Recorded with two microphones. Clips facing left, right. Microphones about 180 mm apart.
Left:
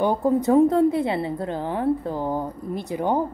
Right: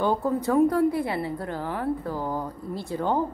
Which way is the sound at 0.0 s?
20° left (ahead or behind).